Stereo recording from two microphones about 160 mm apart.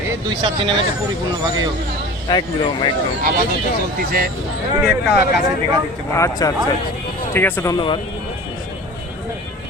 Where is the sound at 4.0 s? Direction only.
70° right (ahead or behind).